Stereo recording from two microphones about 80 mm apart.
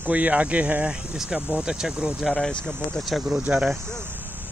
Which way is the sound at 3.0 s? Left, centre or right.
Centre.